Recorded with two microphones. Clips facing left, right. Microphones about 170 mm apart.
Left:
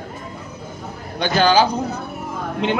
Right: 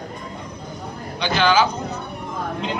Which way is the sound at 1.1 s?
40° left (ahead or behind).